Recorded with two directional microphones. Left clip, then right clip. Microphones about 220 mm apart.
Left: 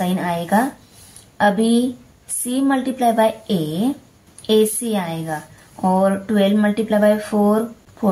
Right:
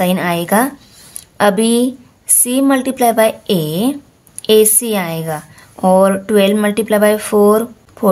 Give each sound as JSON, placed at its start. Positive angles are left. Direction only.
{"t": 0.0, "sound": "a woman's voice", "side_deg": -45}